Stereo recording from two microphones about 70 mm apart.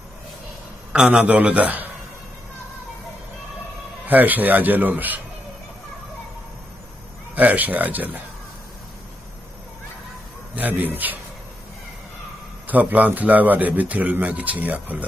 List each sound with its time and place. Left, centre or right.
0.9 s a man's voice: centre
4.1 s a man's voice: right
7.3 s a man's voice: right
10.5 s a man's voice: right
12.6 s a man's voice: right